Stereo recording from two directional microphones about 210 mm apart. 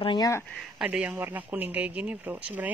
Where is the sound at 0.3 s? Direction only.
10° left (ahead or behind).